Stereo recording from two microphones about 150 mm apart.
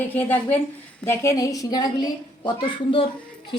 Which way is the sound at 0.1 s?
10° left (ahead or behind).